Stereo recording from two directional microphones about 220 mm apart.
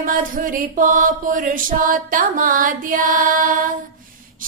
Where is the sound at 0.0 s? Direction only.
40° right (ahead or behind).